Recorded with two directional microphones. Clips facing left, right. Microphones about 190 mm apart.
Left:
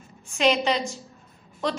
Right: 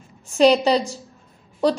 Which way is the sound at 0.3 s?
35° right (ahead or behind).